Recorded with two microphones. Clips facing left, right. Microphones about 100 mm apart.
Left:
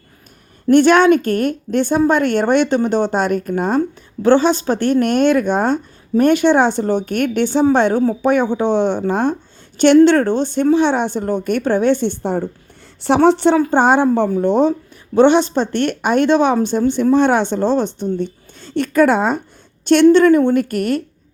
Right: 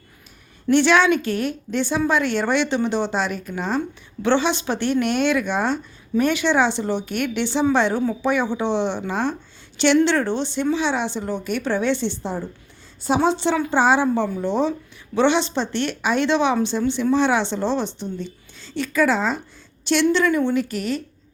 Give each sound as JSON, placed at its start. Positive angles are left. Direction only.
{"t": 0.7, "sound": "a woman's voice", "side_deg": 45}